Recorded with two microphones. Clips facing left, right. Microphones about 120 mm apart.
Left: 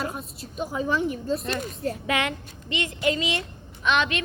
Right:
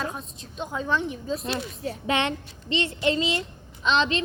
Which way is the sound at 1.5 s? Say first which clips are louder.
Left 1 dB; 45° left (ahead or behind).